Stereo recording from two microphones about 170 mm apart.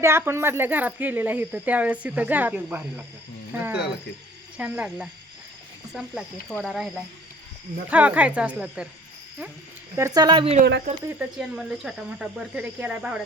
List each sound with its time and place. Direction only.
0.0 s speech: 15° right (ahead or behind)
10.2 s a woman's voice: 30° right (ahead or behind)
10.9 s speech: 50° right (ahead or behind)
11.2 s speech: centre (ahead or behind)